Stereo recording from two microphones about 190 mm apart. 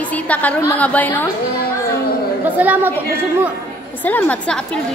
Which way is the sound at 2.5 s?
10° right (ahead or behind).